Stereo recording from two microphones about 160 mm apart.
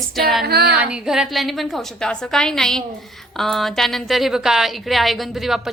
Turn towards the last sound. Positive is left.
turn(degrees=0)  # may be behind; listen again after turning